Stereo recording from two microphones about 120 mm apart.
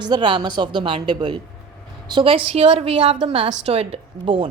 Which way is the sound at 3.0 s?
50° right (ahead or behind).